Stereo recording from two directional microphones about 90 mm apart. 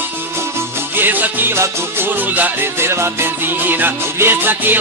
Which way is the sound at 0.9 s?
20° right (ahead or behind).